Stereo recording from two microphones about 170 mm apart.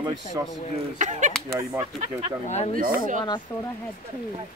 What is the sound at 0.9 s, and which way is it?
Speech, 45° right (ahead or behind).